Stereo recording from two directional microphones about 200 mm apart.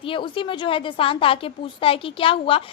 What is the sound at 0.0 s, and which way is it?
A woman's voice, 25° left (ahead or behind).